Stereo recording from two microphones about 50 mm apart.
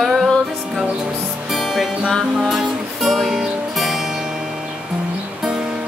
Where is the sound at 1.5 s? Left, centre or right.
Centre.